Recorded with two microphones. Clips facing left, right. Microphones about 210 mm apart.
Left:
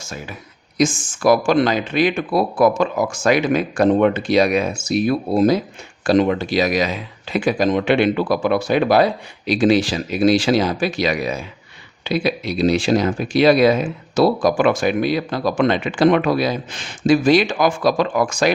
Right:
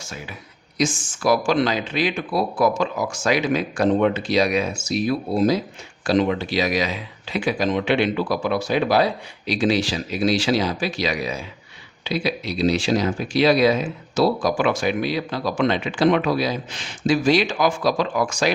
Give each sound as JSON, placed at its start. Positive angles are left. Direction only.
{"t": 0.0, "sound": "speech", "side_deg": 45}